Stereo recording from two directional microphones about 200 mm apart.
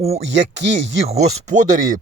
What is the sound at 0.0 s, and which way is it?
Speech, 30° right (ahead or behind).